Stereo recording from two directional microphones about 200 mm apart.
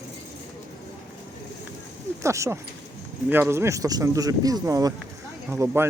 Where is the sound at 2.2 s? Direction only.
15° right (ahead or behind).